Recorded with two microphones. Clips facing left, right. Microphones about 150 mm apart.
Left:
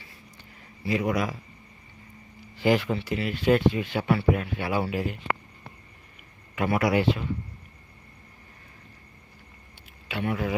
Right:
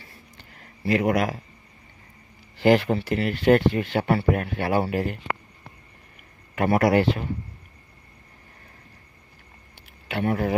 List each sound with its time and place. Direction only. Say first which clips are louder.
0.9 s speech: right 4 dB; 65° right (ahead or behind)
2.6 s speech: right 5 dB; 60° right (ahead or behind)
6.6 s speech: right 4 dB; 45° right (ahead or behind)
10.1 s speech: right 4 dB; 50° right (ahead or behind)